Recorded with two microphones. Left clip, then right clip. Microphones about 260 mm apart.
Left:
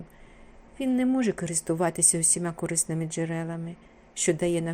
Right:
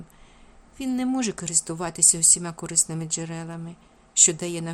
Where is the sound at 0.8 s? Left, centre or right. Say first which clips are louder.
Left 1 dB; centre.